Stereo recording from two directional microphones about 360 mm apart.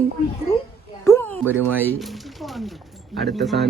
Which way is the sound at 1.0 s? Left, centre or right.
Centre.